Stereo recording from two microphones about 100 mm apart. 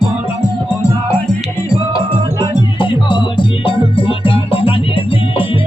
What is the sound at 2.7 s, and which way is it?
Music, 55° left (ahead or behind).